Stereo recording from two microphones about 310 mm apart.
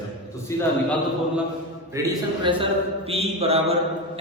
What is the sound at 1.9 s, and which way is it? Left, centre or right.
A man's voice, centre.